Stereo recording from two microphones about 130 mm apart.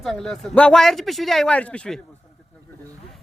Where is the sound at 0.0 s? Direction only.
Centre (ahead or behind).